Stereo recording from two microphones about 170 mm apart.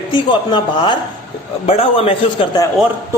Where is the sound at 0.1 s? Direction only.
30° left (ahead or behind).